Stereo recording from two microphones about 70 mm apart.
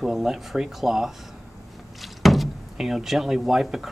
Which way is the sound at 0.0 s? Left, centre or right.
Centre.